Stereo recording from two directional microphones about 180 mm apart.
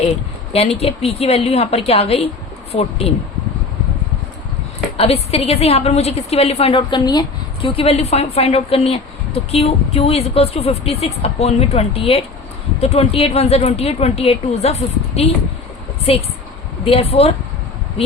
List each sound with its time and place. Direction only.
0.5 s a woman's voice: 35° left (ahead or behind)
4.9 s a woman's voice: 35° left (ahead or behind)